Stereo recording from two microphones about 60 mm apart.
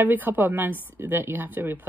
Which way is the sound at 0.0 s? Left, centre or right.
Right.